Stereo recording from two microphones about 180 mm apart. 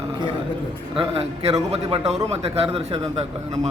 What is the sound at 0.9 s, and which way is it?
A man's voice, 30° right (ahead or behind).